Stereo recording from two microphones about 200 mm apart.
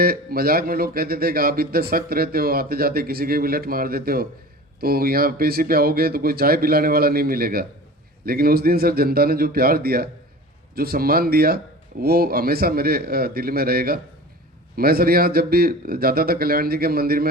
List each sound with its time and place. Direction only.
0.0 s speech: 50° right (ahead or behind)